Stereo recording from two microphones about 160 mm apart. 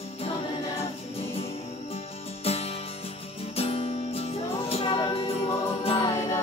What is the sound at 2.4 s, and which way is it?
Music, 40° left (ahead or behind).